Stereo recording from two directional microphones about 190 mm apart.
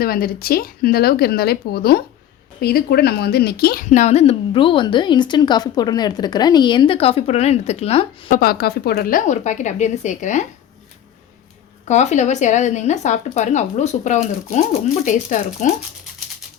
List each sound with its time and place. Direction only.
0.0 s speech: 50° left (ahead or behind)
3.8 s a woman's voice: 40° left (ahead or behind)
8.3 s speech: 50° left (ahead or behind)
11.9 s speech: 40° left (ahead or behind)